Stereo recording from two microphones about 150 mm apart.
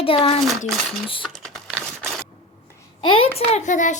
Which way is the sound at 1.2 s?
Centre (ahead or behind).